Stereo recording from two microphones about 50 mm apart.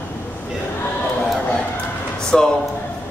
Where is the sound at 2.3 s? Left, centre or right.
Centre.